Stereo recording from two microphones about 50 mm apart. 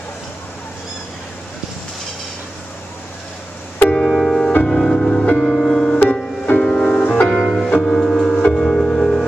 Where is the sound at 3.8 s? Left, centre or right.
Centre.